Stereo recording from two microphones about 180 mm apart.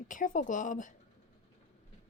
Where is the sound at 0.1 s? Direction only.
45° left (ahead or behind).